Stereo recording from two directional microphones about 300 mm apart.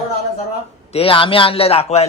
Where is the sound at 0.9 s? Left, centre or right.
Centre.